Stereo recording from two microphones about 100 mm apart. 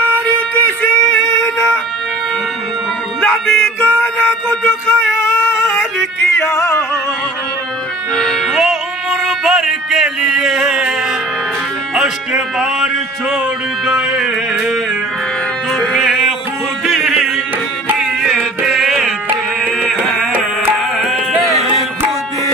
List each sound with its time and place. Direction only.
0.3 s music: 20° left (ahead or behind)
3.2 s music: 25° left (ahead or behind)
8.2 s music: centre (ahead or behind)
11.9 s speech: 5° right (ahead or behind)
13.8 s a sound: 5° right (ahead or behind)
15.9 s music: centre (ahead or behind)